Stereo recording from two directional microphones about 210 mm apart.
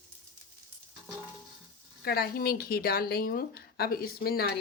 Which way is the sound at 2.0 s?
45° left (ahead or behind).